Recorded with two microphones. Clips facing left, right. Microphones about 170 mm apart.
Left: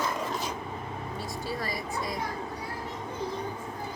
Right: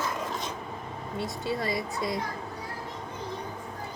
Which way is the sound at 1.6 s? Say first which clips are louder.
Right 3 dB; 25° right (ahead or behind).